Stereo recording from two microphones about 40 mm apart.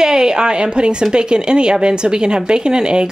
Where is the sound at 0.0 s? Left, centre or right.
Centre.